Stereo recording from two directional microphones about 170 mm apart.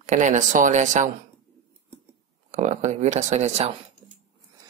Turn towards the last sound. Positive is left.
turn(degrees=-40)  # may be behind; listen again after turning